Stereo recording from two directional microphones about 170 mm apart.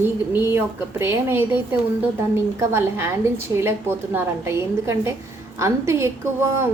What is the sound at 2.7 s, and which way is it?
A woman's voice, 15° right (ahead or behind).